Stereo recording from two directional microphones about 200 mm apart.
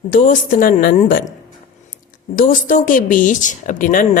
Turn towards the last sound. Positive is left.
turn(degrees=40)  # may be behind; listen again after turning